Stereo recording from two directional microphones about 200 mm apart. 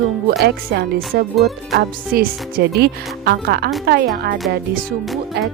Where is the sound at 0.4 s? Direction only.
55° right (ahead or behind).